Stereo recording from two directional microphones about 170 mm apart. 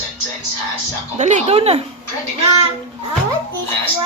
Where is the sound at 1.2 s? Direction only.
45° right (ahead or behind).